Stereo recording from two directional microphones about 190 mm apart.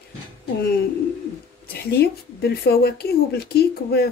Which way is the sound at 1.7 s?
55° left (ahead or behind).